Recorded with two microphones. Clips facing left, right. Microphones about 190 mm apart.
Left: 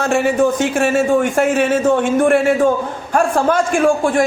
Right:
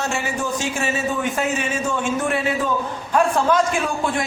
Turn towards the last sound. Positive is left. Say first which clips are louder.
# left 9 dB
turn(degrees=50)  # may be behind; listen again after turning